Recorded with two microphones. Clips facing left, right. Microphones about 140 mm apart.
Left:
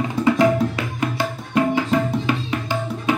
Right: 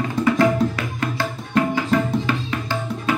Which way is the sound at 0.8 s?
20° left (ahead or behind).